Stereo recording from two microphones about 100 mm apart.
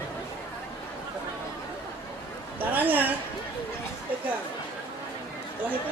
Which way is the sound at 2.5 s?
15° right (ahead or behind).